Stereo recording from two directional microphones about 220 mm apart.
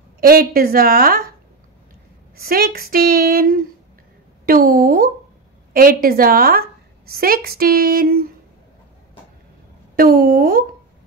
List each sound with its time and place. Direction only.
0.2 s a woman's voice: 40° right (ahead or behind)
2.3 s a woman's voice: 45° right (ahead or behind)
9.9 s a woman's voice: 45° right (ahead or behind)